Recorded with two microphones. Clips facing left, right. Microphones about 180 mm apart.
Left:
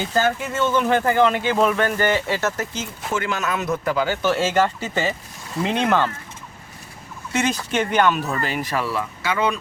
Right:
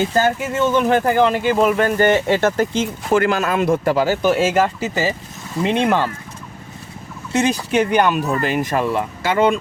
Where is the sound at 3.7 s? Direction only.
30° right (ahead or behind).